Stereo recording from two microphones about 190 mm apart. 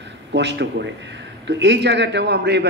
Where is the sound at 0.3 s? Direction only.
65° right (ahead or behind).